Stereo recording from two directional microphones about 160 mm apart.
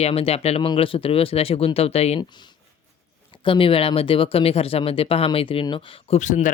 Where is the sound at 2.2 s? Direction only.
30° left (ahead or behind).